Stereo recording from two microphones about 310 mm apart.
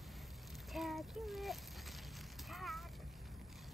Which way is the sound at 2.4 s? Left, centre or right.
Centre.